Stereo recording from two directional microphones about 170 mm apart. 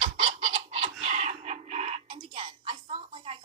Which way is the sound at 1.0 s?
40° right (ahead or behind).